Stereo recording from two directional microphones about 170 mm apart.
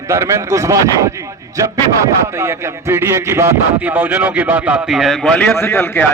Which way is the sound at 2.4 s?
15° right (ahead or behind).